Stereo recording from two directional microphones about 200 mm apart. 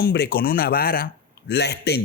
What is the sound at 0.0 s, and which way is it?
Speech, 55° left (ahead or behind).